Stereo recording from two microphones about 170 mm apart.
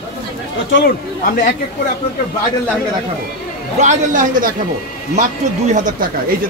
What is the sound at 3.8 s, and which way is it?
Speech, 45° right (ahead or behind).